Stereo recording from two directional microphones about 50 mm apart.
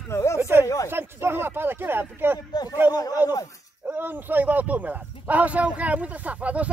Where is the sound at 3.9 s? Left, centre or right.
Right.